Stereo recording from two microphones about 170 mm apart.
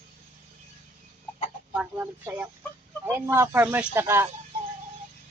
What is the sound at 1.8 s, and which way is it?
Speech, 10° right (ahead or behind).